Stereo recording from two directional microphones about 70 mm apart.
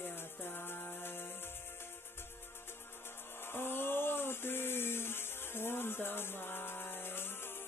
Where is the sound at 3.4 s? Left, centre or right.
Left.